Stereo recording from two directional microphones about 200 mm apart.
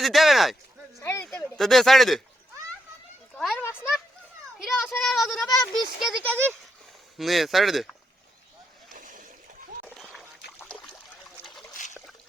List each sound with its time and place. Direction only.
0.0 s speech: centre (ahead or behind)
1.0 s a sound: 10° left (ahead or behind)
3.3 s a sound: 5° left (ahead or behind)
6.0 s speech: centre (ahead or behind)
9.0 s splash: 40° right (ahead or behind)
9.8 s splash: centre (ahead or behind)
11.4 s pig: centre (ahead or behind)
11.7 s trickle: 40° left (ahead or behind)